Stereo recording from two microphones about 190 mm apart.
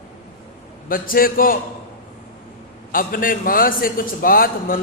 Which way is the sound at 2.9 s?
50° left (ahead or behind).